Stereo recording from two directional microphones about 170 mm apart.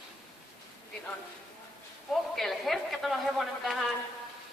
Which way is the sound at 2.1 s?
Centre (ahead or behind).